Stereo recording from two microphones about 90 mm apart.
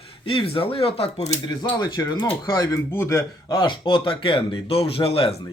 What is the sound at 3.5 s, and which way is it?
Speech, 55° left (ahead or behind).